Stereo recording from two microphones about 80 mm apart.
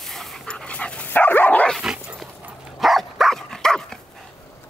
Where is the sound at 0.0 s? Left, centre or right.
Centre.